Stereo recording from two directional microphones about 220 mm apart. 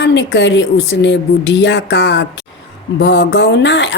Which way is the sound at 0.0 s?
55° left (ahead or behind).